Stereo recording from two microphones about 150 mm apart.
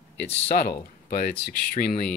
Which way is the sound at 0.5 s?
90° left.